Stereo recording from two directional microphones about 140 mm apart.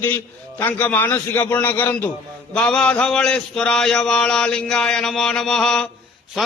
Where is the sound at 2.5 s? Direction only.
5° left (ahead or behind).